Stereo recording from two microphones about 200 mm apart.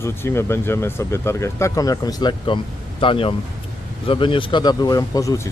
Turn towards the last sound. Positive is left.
turn(degrees=15)  # may be behind; listen again after turning